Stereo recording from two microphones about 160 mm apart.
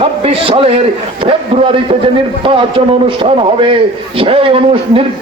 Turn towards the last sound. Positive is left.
turn(degrees=-35)  # may be behind; listen again after turning